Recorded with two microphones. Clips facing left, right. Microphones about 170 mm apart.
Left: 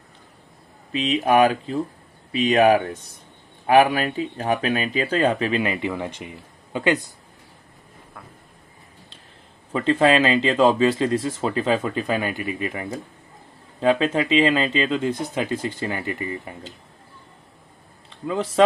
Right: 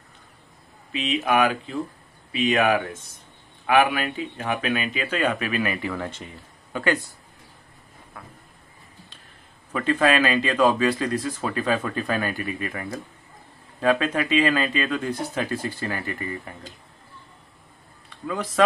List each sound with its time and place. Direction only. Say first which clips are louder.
0.9 s speech: left 4 dB; 35° left (ahead or behind); by 7.1 s 20° left (ahead or behind)
9.7 s speech: left 3 dB; 25° left (ahead or behind)
18.1 s speech: left 4 dB; 25° left (ahead or behind)